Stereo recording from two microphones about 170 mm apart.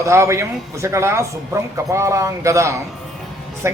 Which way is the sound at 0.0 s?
15° right (ahead or behind).